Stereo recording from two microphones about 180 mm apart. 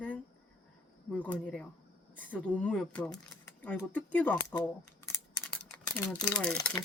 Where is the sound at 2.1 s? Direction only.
10° left (ahead or behind).